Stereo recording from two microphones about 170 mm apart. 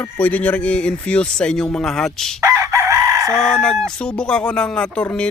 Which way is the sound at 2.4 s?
15° right (ahead or behind).